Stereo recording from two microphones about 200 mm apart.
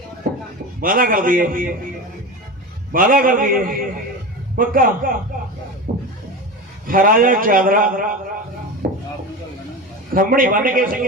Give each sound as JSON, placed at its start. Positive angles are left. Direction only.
{"t": 0.2, "sound": "a sound", "side_deg": -45}
{"t": 0.8, "sound": "a man's voice", "side_deg": -45}
{"t": 2.9, "sound": "a man's voice", "side_deg": -45}
{"t": 5.9, "sound": "a sound", "side_deg": -45}
{"t": 6.8, "sound": "a man's voice", "side_deg": -45}
{"t": 8.8, "sound": "chopping", "side_deg": -50}
{"t": 10.2, "sound": "a man's voice", "side_deg": -45}